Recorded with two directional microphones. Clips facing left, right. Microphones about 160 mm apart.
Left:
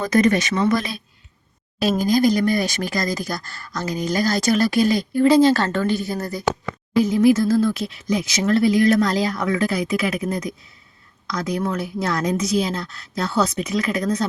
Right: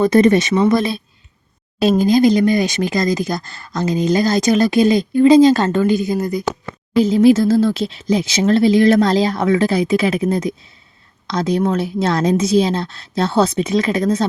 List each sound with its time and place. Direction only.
0.0 s speech: 25° right (ahead or behind)
7.0 s speech: 25° right (ahead or behind)